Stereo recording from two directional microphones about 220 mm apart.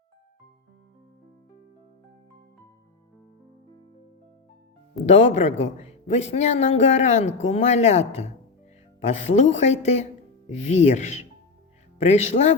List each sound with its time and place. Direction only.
5.0 s speech: 30° left (ahead or behind)
12.0 s speech: 30° left (ahead or behind)